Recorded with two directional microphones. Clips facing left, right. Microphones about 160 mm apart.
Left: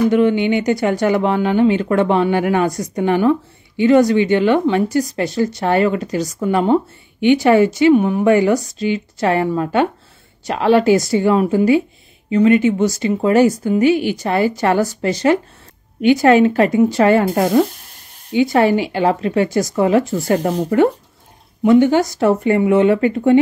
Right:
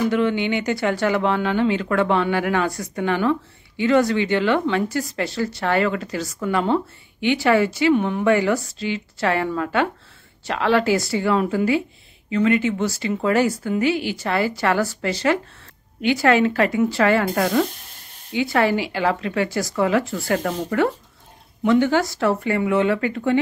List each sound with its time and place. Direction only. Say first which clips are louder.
0.1 s speech: left 6 dB; 15° left (ahead or behind)